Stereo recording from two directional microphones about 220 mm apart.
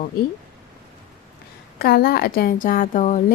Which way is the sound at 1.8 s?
45° left (ahead or behind).